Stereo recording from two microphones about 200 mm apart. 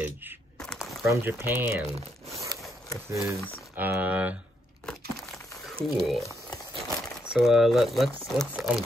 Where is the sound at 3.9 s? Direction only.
10° right (ahead or behind).